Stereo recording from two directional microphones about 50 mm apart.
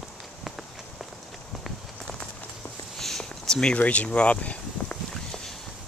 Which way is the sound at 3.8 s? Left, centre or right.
Left.